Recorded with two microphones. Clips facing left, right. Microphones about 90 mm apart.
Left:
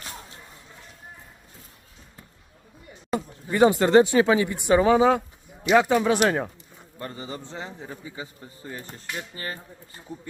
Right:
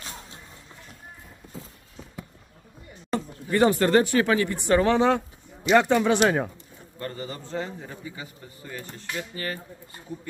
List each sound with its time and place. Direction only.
3.1 s speech: 10° left (ahead or behind)
7.0 s a man's voice: 20° left (ahead or behind)